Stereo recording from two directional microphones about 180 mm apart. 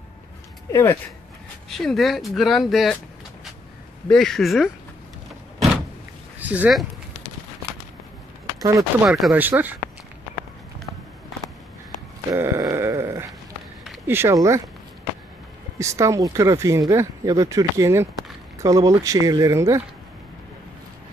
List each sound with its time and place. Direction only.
0.7 s speech: 15° left (ahead or behind)
1.7 s speech: centre (ahead or behind)
4.1 s speech: centre (ahead or behind)
6.4 s speech: 10° right (ahead or behind)
9.0 s speech: 5° right (ahead or behind)
12.3 s sheep: 15° right (ahead or behind)
14.0 s speech: 15° right (ahead or behind)
15.8 s speech: 15° right (ahead or behind)